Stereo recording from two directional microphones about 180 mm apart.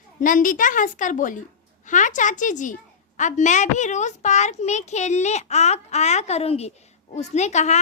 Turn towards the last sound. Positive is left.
turn(degrees=40)  # may be behind; listen again after turning